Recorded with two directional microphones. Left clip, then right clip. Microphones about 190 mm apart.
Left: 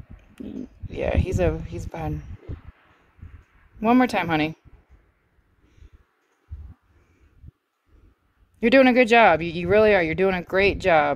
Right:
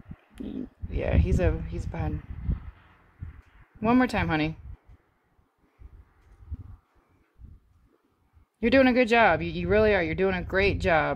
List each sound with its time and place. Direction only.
0.4 s a sound: 5° right (ahead or behind)
0.8 s speech: 35° left (ahead or behind)
3.8 s speech: 35° left (ahead or behind)
8.5 s speech: 40° left (ahead or behind)